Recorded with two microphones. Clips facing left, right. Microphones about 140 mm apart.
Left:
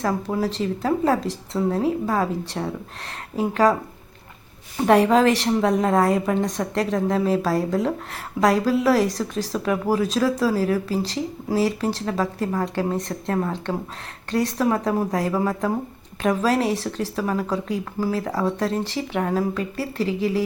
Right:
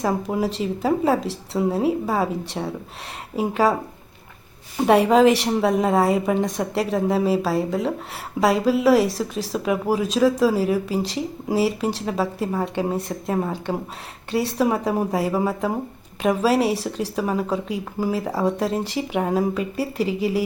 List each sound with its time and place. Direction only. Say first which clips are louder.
0.3 s a woman's voice: even; 10° right (ahead or behind)
4.9 s a woman's voice: right 1 dB; 10° right (ahead or behind)